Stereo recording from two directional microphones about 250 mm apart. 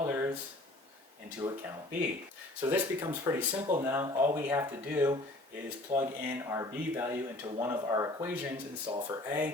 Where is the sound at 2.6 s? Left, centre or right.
Centre.